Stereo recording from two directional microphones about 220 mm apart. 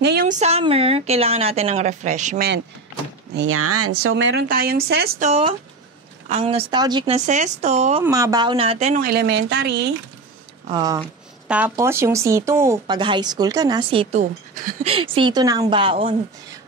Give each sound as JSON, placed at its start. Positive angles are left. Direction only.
{"t": 0.3, "sound": "a woman's voice", "side_deg": -30}
{"t": 3.3, "sound": "speech", "side_deg": -70}
{"t": 4.0, "sound": "speech", "side_deg": -60}
{"t": 4.5, "sound": "speech", "side_deg": -45}
{"t": 5.2, "sound": "a woman's voice", "side_deg": -30}
{"t": 7.2, "sound": "speech", "side_deg": -35}
{"t": 8.0, "sound": "a woman's voice", "side_deg": -15}
{"t": 9.0, "sound": "speech", "side_deg": -50}
{"t": 10.7, "sound": "a woman's voice", "side_deg": -20}
{"t": 11.4, "sound": "speech", "side_deg": -5}
{"t": 14.5, "sound": "speech", "side_deg": -35}
{"t": 14.9, "sound": "a woman's voice", "side_deg": -25}